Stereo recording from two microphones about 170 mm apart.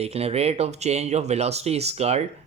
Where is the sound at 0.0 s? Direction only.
35° right (ahead or behind).